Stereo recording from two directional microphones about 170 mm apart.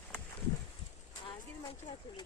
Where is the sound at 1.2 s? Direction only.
30° left (ahead or behind).